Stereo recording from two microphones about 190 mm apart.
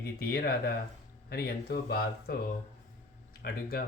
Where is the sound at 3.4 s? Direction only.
55° left (ahead or behind).